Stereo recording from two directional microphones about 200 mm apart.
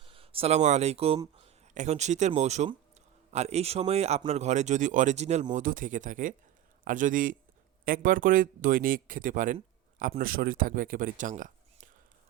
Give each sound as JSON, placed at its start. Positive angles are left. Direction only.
{"t": 0.0, "sound": "speech", "side_deg": -25}